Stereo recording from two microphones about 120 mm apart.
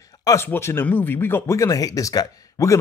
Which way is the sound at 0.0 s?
30° left (ahead or behind).